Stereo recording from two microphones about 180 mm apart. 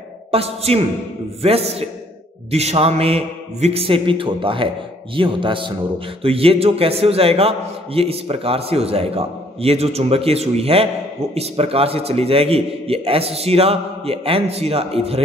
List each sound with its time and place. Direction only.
0.3 s a man's voice: 35° right (ahead or behind)